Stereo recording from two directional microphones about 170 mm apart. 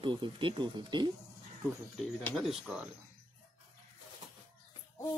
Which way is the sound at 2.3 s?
Centre (ahead or behind).